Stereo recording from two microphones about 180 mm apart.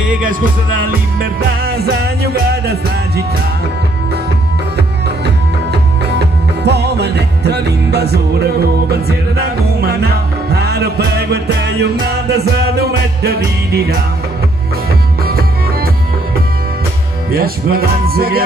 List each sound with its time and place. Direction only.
0.3 s music: 50° right (ahead or behind)
5.2 s music: 65° right (ahead or behind)
15.2 s music: 55° right (ahead or behind)
17.3 s music: 55° right (ahead or behind)